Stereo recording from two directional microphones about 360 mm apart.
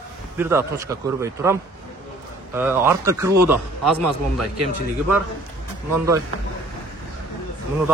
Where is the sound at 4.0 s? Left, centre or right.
Right.